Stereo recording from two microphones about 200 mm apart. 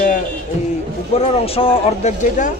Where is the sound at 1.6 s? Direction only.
30° left (ahead or behind).